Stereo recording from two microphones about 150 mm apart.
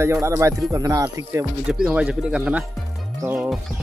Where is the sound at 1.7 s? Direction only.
5° right (ahead or behind).